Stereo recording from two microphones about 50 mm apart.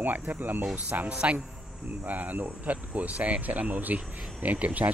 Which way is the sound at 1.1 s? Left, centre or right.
Right.